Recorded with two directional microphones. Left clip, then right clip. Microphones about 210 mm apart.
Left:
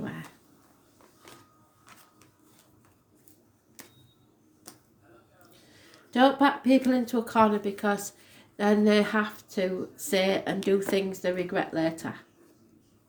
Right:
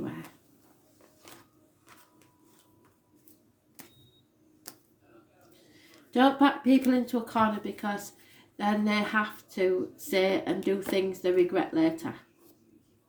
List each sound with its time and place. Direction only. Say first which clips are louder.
6.1 s speech: left 1 dB; 30° left (ahead or behind)